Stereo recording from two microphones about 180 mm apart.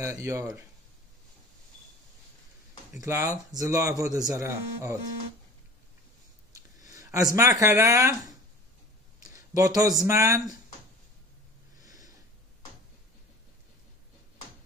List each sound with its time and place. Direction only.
0.0 s speech: 15° right (ahead or behind)
3.0 s speech: 15° right (ahead or behind)
6.5 s speech: 20° right (ahead or behind)
11.8 s snort: 20° right (ahead or behind)